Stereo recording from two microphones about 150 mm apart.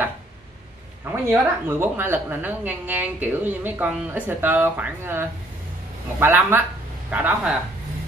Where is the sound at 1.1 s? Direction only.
15° right (ahead or behind).